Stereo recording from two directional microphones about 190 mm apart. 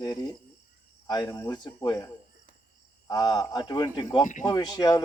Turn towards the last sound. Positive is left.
turn(degrees=20)  # may be behind; listen again after turning